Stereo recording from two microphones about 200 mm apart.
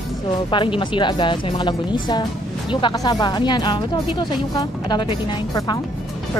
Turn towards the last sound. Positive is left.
turn(degrees=20)  # may be behind; listen again after turning